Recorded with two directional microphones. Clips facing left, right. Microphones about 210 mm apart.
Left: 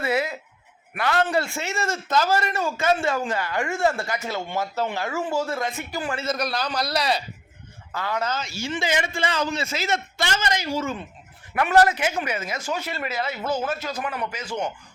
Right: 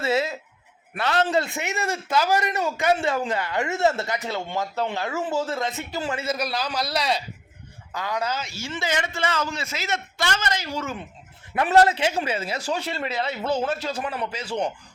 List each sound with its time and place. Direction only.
0.0 s a sound: 25° right (ahead or behind)
0.9 s speech: 25° right (ahead or behind)
6.2 s a man's voice: 5° right (ahead or behind)
7.9 s a man's voice: 15° right (ahead or behind)
8.6 s a man's voice: 15° left (ahead or behind); by 10.2 s 30° left (ahead or behind)
10.2 s a man's voice: 15° left (ahead or behind)
11.5 s speech: 25° right (ahead or behind)